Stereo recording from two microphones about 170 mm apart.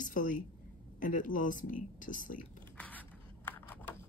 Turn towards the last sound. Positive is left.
turn(degrees=10)  # may be behind; listen again after turning